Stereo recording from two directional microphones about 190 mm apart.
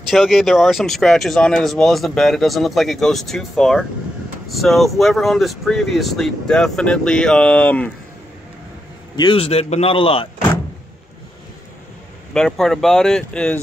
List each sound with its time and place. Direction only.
0.1 s speech: centre (ahead or behind)
9.1 s a man's voice: 25° left (ahead or behind)
12.4 s speech: centre (ahead or behind)